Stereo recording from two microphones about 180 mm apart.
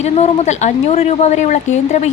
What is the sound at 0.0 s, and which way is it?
A woman's voice, 40° left (ahead or behind).